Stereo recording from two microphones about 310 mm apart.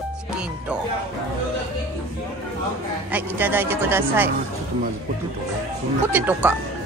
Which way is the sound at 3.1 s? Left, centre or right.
Centre.